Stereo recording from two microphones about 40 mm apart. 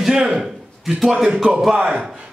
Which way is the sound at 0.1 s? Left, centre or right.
Centre.